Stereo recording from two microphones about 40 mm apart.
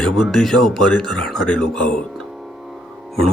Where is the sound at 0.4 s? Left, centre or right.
Centre.